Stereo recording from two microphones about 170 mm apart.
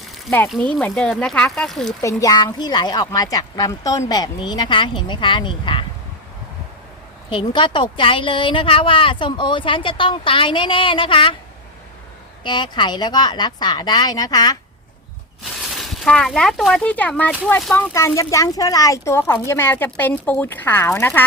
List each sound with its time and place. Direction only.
0.4 s speech: 5° left (ahead or behind)
2.0 s speech: 20° left (ahead or behind)
7.3 s speech: 30° left (ahead or behind)
12.4 s speech: 25° left (ahead or behind)
15.8 s speech: 5° left (ahead or behind)